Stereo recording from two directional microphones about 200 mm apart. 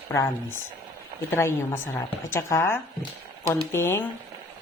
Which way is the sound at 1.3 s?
15° left (ahead or behind).